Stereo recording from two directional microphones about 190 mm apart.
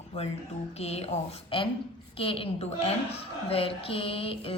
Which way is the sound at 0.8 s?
30° left (ahead or behind).